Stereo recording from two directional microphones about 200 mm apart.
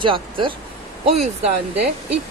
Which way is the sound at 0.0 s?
25° right (ahead or behind).